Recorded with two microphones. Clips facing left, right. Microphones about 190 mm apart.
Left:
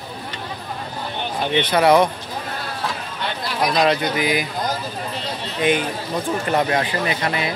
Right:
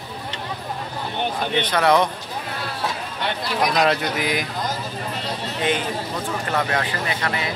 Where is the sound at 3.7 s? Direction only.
Centre (ahead or behind).